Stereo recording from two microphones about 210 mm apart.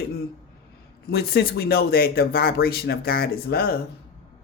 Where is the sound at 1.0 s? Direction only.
45° left (ahead or behind).